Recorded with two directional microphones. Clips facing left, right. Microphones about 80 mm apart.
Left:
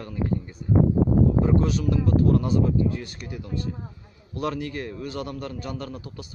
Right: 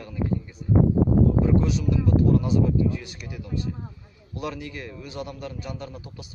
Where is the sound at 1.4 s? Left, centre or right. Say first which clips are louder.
Even; left.